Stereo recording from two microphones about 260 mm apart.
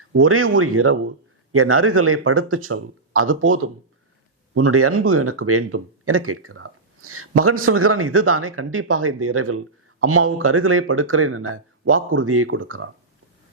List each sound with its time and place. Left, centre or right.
0.2 s speech: right